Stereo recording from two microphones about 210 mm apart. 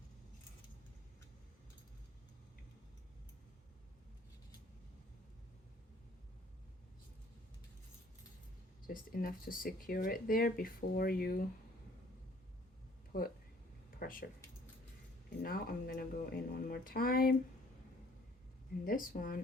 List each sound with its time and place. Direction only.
8.9 s speech: 45° left (ahead or behind)
13.1 s speech: 45° left (ahead or behind)
15.4 s speech: 45° left (ahead or behind)
18.9 s speech: 40° left (ahead or behind)